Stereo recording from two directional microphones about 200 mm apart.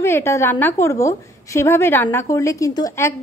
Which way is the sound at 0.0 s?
10° left (ahead or behind).